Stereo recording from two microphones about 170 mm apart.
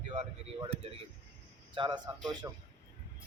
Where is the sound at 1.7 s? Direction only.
25° right (ahead or behind).